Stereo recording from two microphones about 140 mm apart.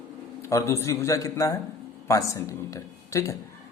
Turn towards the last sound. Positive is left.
turn(degrees=20)  # may be behind; listen again after turning